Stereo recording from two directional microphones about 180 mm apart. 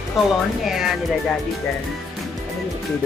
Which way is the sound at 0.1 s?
Centre (ahead or behind).